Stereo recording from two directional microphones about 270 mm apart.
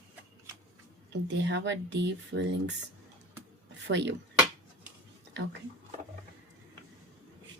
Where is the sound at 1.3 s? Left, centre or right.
Right.